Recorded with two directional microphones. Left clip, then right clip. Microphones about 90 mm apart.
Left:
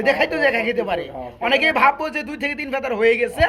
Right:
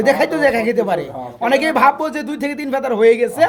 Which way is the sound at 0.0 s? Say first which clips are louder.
Right 3 dB; 40° right (ahead or behind).